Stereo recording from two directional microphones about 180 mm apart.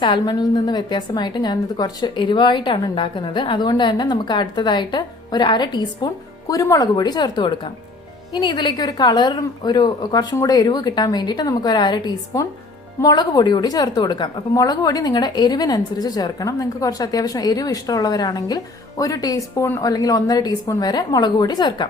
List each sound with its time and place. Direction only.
0.0 s a woman's voice: 25° left (ahead or behind)